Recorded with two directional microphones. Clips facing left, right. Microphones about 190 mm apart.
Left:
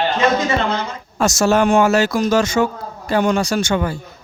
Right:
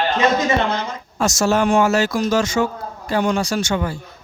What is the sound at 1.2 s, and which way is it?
A man's voice, 60° left (ahead or behind).